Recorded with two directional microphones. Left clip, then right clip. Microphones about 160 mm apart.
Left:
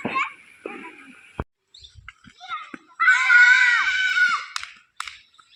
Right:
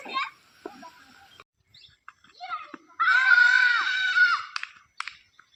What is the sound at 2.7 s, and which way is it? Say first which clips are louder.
Screaming: left 5 dB; 15° right (ahead or behind).